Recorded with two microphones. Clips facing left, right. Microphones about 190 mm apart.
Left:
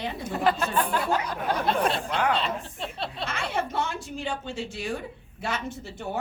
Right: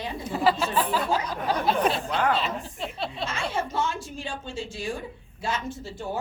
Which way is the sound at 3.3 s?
60° left (ahead or behind).